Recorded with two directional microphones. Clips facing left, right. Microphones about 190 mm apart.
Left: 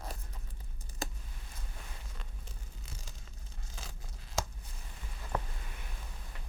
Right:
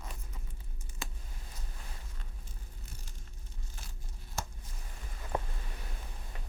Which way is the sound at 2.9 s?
90° left.